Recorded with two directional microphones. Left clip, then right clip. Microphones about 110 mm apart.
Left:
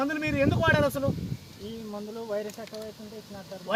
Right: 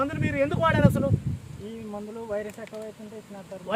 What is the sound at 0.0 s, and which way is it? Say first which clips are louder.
Speech: even; 30° right (ahead or behind).